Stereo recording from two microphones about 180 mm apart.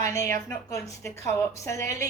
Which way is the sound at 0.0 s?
15° left (ahead or behind).